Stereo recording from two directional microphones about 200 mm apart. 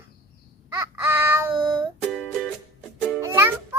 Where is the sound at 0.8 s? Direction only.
15° right (ahead or behind).